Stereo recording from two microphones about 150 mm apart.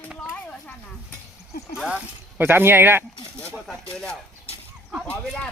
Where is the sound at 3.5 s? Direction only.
Centre (ahead or behind).